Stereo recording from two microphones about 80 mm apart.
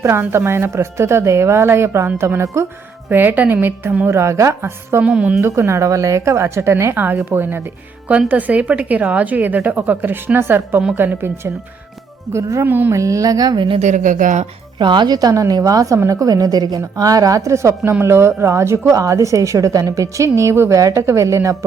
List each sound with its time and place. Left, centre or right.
0.0 s speech: right
3.1 s a woman's voice: right
4.2 s speech: right
5.0 s a woman's voice: centre
5.4 s a woman's voice: right
12.3 s speech: right
12.6 s a woman's voice: right
12.9 s a woman's voice: right
14.8 s a woman's voice: right